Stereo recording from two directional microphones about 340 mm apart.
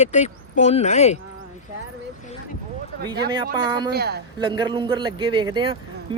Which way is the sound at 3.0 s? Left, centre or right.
Right.